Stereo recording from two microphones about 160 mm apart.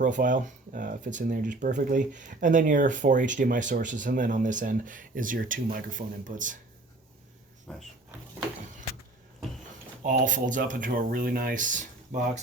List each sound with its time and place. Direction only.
0.0 s speech: 55° right (ahead or behind)
7.7 s speech: 5° left (ahead or behind)
10.1 s speech: 55° right (ahead or behind)